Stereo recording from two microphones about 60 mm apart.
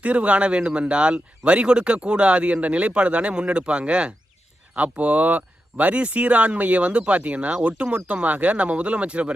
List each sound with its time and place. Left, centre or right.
0.0 s speech: right